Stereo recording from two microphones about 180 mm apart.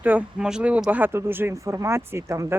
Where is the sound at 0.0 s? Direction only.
10° right (ahead or behind).